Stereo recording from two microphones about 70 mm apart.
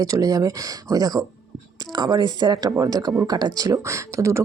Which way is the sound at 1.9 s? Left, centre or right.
Right.